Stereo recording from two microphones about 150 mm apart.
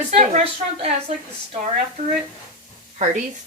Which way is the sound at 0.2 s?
50° right (ahead or behind).